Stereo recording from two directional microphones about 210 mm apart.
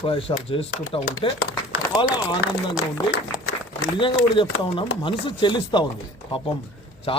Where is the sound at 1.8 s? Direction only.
20° left (ahead or behind).